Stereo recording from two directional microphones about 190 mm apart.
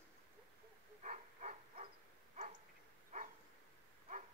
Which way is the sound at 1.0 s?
40° right (ahead or behind).